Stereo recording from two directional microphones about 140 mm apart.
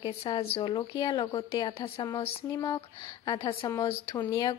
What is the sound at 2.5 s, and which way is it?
Speech, 30° left (ahead or behind).